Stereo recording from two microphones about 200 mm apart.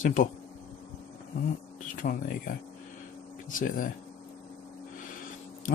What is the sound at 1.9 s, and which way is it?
Speech, 45° left (ahead or behind).